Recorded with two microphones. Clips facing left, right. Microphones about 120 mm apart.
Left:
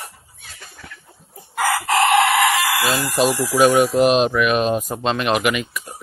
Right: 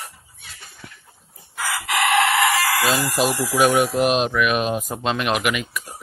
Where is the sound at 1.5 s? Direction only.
50° left (ahead or behind).